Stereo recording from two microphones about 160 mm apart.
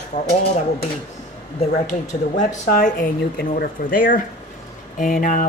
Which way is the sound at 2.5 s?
55° left (ahead or behind).